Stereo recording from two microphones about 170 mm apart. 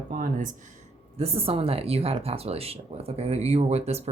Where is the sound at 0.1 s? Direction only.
50° right (ahead or behind).